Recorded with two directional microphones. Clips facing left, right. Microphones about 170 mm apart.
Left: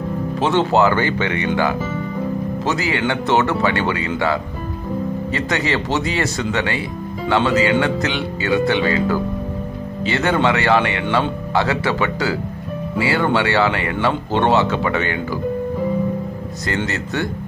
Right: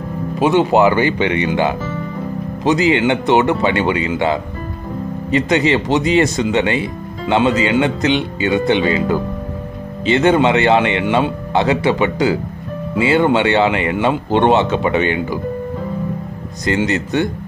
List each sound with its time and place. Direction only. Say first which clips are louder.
0.4 s speech: right 4 dB; 10° right (ahead or behind)
5.3 s speech: right 8 dB; 20° right (ahead or behind)
16.6 s speech: right 6 dB; 20° right (ahead or behind)